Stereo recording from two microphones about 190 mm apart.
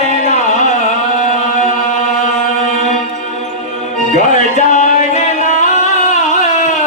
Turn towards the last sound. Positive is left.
turn(degrees=40)  # may be behind; listen again after turning